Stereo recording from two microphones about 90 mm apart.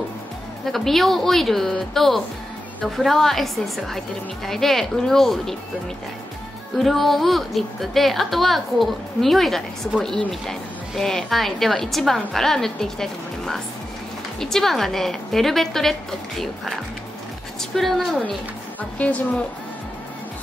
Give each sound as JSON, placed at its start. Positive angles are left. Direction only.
{"t": 0.7, "sound": "a woman's voice", "side_deg": 0}
{"t": 6.8, "sound": "a woman's voice", "side_deg": 0}
{"t": 18.8, "sound": "speech", "side_deg": 15}